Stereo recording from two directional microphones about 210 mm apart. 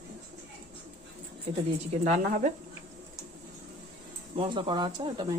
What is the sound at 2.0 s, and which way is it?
Speech, 35° right (ahead or behind).